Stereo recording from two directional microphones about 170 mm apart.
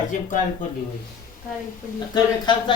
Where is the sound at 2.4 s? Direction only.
30° left (ahead or behind).